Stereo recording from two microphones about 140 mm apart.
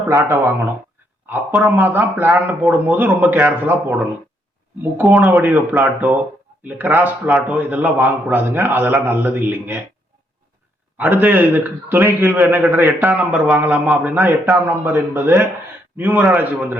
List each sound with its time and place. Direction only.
0.1 s a man's voice: 20° right (ahead or behind)
5.1 s a man's voice: centre (ahead or behind)
10.9 s a man's voice: 10° right (ahead or behind)